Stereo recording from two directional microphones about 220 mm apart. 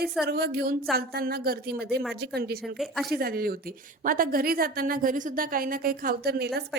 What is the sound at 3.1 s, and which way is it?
A woman's voice, 45° right (ahead or behind).